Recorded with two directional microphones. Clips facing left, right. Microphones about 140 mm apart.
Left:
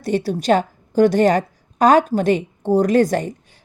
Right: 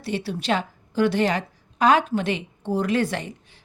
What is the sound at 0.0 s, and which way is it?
A woman's voice, 45° left (ahead or behind).